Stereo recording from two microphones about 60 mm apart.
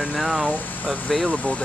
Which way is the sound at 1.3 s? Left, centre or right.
Left.